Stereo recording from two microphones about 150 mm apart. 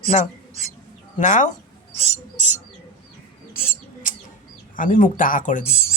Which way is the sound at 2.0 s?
50° right (ahead or behind).